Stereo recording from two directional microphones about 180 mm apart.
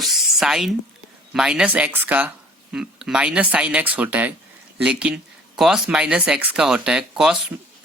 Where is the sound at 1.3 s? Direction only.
5° right (ahead or behind).